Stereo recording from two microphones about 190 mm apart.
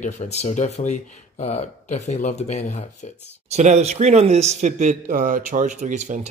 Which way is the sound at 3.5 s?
35° right (ahead or behind).